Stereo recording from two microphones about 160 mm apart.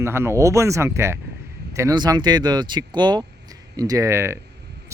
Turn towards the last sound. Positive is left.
turn(degrees=-15)  # may be behind; listen again after turning